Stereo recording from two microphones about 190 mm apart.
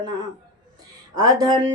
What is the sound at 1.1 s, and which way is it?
Speech, 20° right (ahead or behind).